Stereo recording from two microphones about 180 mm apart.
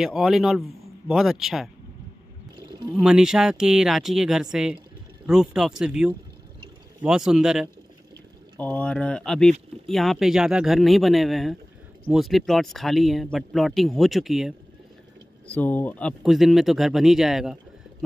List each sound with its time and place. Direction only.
0.0 s speech: centre (ahead or behind)
2.9 s speech: 5° right (ahead or behind)
8.5 s speech: 10° left (ahead or behind)